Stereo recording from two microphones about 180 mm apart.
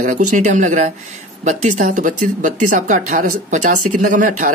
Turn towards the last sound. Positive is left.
turn(degrees=-45)  # may be behind; listen again after turning